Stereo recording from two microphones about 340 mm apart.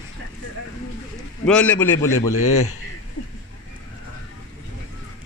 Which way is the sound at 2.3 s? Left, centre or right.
Left.